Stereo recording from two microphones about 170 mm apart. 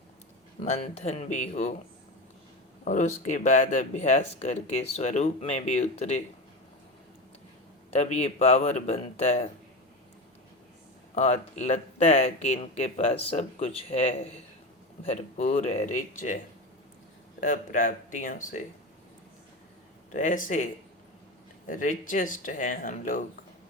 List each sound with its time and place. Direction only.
0.6 s speech: 40° left (ahead or behind)
2.8 s speech: 45° left (ahead or behind)
7.9 s speech: 40° left (ahead or behind)
11.1 s speech: 40° left (ahead or behind)
17.4 s speech: 50° left (ahead or behind)
20.1 s speech: 50° left (ahead or behind)
21.7 s speech: 50° left (ahead or behind)